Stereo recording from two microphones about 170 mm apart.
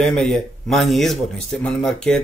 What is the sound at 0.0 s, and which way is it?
A man's voice, 5° left (ahead or behind).